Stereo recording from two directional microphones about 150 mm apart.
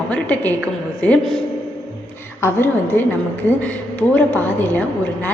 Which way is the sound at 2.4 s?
15° left (ahead or behind).